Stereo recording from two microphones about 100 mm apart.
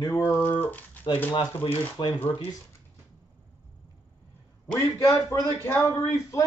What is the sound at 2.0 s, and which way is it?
Speech, 60° left (ahead or behind).